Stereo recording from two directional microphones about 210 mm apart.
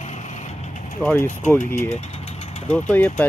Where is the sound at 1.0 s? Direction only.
10° left (ahead or behind).